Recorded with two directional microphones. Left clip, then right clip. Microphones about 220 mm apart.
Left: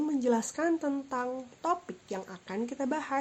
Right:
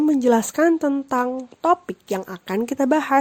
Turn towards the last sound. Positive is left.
turn(degrees=-45)  # may be behind; listen again after turning